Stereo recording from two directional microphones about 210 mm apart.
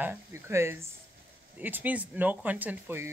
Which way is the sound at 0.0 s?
10° right (ahead or behind).